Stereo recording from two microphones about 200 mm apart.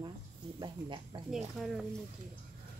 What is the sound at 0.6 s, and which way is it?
Speech, 25° right (ahead or behind).